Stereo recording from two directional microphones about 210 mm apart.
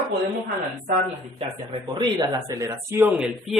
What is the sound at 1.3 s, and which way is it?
Speech, 25° right (ahead or behind).